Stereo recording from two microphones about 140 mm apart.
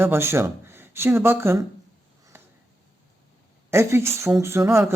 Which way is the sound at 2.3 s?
15° right (ahead or behind).